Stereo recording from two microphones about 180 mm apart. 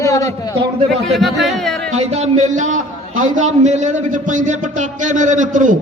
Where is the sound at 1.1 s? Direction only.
Centre (ahead or behind).